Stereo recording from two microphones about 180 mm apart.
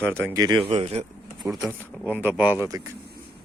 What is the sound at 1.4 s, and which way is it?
Speech, 20° right (ahead or behind).